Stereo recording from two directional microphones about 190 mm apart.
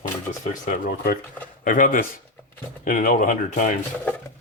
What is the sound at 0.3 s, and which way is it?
Speech, 40° left (ahead or behind).